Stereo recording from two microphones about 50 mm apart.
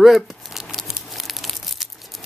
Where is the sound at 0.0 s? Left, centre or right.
Centre.